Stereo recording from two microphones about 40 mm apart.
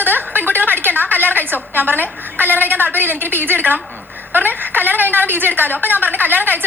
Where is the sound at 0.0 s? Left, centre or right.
Right.